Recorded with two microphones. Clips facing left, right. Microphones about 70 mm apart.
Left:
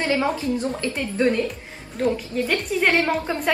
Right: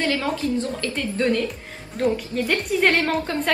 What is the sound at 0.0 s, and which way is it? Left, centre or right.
A woman's voice, left.